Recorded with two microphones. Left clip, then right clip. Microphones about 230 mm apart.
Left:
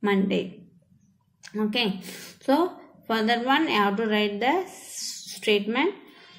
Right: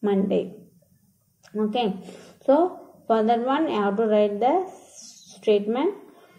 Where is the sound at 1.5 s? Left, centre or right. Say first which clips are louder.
Right 2 dB; left.